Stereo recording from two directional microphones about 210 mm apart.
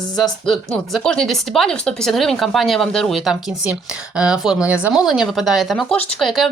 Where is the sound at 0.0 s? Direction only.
Centre (ahead or behind).